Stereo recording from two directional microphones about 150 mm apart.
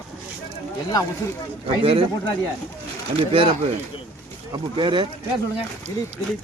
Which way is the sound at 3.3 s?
35° right (ahead or behind).